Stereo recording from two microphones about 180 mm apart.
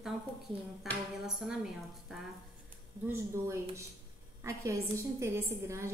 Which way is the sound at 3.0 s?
15° right (ahead or behind).